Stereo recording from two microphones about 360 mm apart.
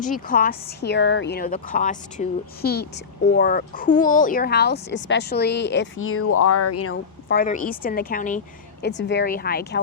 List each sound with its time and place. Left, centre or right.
0.0 s a woman's voice: left